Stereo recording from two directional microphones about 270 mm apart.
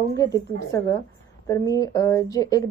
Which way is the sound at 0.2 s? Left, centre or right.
Centre.